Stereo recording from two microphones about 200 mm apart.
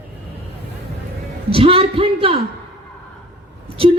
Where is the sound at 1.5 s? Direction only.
30° right (ahead or behind).